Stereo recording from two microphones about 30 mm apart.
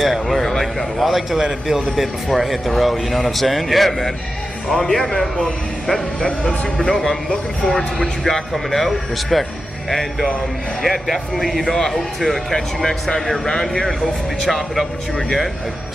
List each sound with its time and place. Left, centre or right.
0.1 s a man's voice: centre
1.4 s a man's voice: centre
2.2 s a man's voice: centre
11.7 s speech: centre
14.4 s a man's voice: centre